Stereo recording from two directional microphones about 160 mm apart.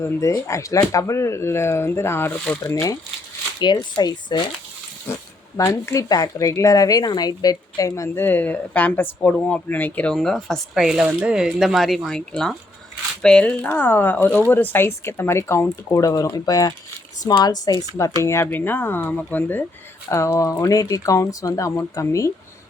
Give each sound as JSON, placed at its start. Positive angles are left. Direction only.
{"t": 0.0, "sound": "speech", "side_deg": 20}
{"t": 3.6, "sound": "speech", "side_deg": 30}
{"t": 5.5, "sound": "speech", "side_deg": 20}